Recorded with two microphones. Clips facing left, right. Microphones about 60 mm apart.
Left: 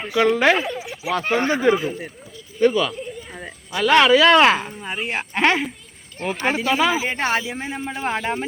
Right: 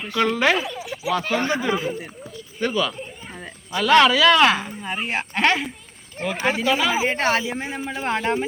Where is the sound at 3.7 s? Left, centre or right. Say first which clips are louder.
Left 1 dB; left.